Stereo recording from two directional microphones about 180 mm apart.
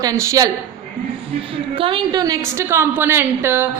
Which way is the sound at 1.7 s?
30° right (ahead or behind).